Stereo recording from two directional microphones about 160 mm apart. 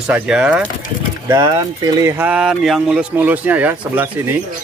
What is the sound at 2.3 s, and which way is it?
Speech, 5° right (ahead or behind).